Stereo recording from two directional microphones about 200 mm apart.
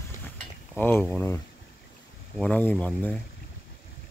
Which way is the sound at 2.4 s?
10° left (ahead or behind).